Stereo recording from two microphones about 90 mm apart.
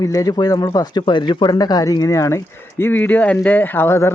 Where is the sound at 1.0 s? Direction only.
60° left (ahead or behind); by 2.4 s 35° left (ahead or behind).